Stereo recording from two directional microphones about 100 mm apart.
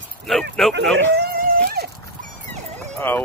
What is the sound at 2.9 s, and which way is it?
Speech, 20° left (ahead or behind).